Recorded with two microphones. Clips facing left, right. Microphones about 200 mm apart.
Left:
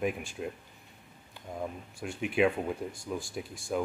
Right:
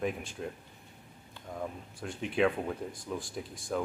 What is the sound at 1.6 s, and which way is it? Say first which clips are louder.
Speech: left 1 dB; 10° left (ahead or behind).